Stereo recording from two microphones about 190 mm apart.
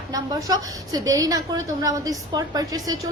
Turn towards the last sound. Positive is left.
turn(degrees=-20)  # may be behind; listen again after turning